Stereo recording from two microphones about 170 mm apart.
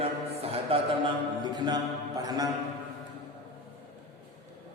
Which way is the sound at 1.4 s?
25° right (ahead or behind).